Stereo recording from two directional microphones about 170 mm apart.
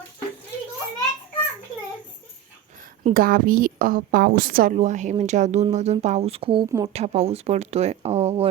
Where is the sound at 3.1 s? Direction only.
55° right (ahead or behind).